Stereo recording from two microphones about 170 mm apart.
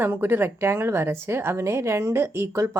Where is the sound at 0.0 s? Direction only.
15° right (ahead or behind).